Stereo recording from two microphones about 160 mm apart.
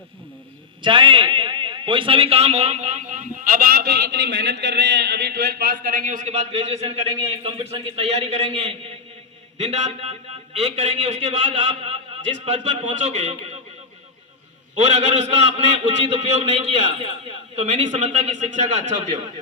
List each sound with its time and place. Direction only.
0.8 s a man's voice: 30° right (ahead or behind)
14.8 s a man's voice: 45° right (ahead or behind)